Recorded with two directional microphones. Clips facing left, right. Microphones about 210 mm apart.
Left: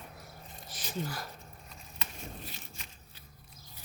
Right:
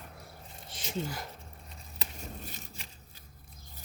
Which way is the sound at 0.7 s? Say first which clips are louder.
Right 2 dB; 25° right (ahead or behind).